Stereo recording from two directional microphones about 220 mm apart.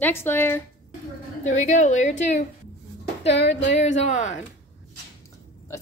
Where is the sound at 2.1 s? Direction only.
50° left (ahead or behind).